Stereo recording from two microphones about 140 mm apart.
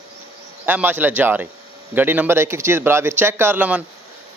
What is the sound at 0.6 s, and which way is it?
Speech, 10° right (ahead or behind).